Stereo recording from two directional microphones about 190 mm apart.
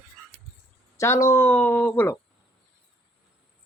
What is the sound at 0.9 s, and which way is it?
Speech, 15° left (ahead or behind).